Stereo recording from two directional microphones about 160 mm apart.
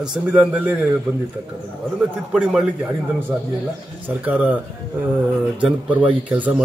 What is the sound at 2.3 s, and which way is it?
Speech, 5° right (ahead or behind).